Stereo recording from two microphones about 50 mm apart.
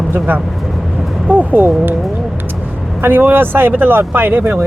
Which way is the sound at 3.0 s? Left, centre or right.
Right.